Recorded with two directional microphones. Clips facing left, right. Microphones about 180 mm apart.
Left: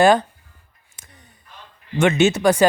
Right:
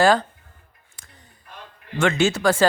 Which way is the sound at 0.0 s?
20° left (ahead or behind).